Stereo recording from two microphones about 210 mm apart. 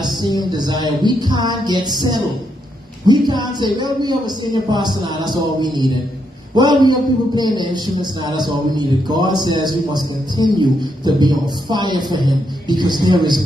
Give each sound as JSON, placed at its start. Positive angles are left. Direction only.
{"t": 0.0, "sound": "a man's voice", "side_deg": -20}